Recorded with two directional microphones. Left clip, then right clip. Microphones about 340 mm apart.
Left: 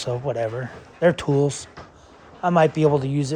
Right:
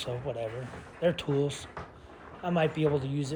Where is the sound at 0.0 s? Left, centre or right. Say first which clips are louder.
Left 10 dB; left.